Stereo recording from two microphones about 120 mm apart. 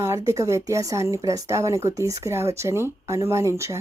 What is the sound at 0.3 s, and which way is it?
A woman's voice, 25° right (ahead or behind).